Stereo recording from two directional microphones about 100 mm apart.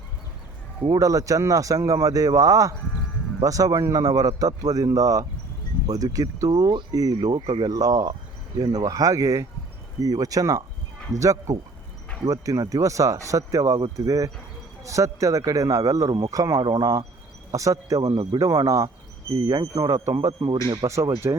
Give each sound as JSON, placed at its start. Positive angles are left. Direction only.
{"t": 0.9, "sound": "speech", "side_deg": -35}
{"t": 7.2, "sound": "speech", "side_deg": -50}
{"t": 7.6, "sound": "speech", "side_deg": -40}